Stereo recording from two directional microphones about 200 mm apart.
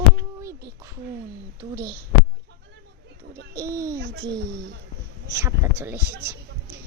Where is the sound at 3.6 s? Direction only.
15° right (ahead or behind).